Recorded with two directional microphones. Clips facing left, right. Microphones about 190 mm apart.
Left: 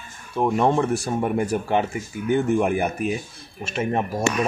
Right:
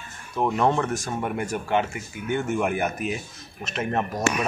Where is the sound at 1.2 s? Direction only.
30° left (ahead or behind).